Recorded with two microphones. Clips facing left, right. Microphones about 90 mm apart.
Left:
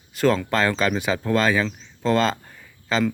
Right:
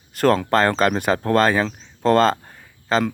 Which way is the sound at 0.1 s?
50° right (ahead or behind).